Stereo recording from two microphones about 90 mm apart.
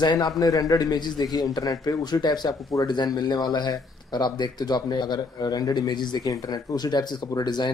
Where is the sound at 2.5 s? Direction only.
35° left (ahead or behind).